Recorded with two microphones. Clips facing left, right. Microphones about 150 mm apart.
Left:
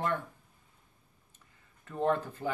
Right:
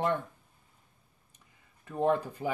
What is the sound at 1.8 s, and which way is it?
Speech, 15° right (ahead or behind).